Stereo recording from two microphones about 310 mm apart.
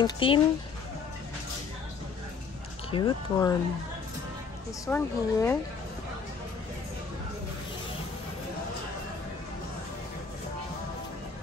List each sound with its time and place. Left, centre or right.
0.0 s speech: centre
2.9 s speech: centre
4.8 s speech: centre